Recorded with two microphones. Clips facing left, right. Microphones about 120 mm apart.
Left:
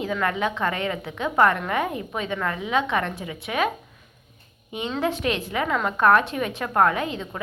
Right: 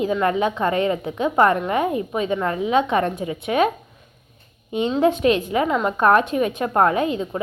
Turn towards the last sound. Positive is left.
turn(degrees=-30)  # may be behind; listen again after turning